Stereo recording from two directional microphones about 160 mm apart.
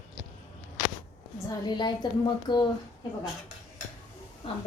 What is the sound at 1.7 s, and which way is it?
Speech, 30° left (ahead or behind).